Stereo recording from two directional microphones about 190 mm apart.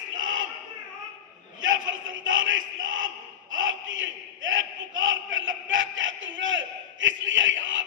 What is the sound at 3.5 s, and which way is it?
Battle cry, 90° right.